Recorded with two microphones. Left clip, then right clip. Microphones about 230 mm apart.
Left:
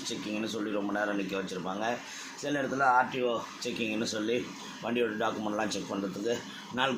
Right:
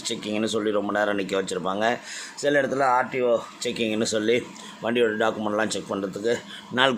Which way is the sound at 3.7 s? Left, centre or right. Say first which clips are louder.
Right 8 dB; right.